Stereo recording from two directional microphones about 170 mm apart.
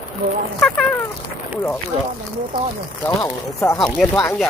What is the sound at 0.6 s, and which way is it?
Speech, 5° left (ahead or behind).